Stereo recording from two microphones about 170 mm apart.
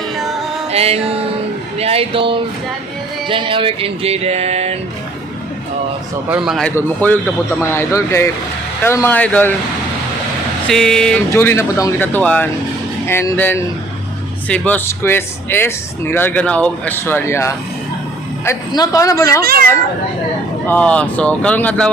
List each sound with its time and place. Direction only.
0.7 s music: 35° right (ahead or behind)
6.3 s speech: centre (ahead or behind)
6.7 s speech: 10° left (ahead or behind)
10.7 s speech: centre (ahead or behind)
11.3 s a man's voice: 15° left (ahead or behind)
19.4 s speech: 60° right (ahead or behind)
20.7 s speech: 10° left (ahead or behind)